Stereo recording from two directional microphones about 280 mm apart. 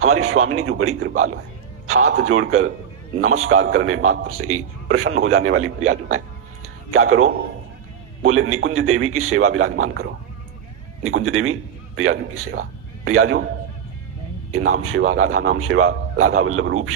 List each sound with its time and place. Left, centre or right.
0.0 s a man's voice: right
9.8 s speech: right
11.0 s a man's voice: right
14.8 s a man's voice: right